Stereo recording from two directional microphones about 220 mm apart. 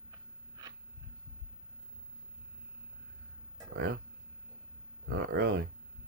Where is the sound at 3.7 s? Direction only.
50° right (ahead or behind).